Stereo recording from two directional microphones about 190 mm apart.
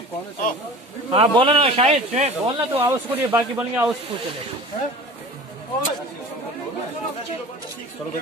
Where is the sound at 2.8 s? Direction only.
10° right (ahead or behind).